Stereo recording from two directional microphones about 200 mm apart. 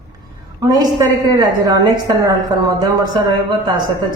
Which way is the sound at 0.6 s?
20° right (ahead or behind).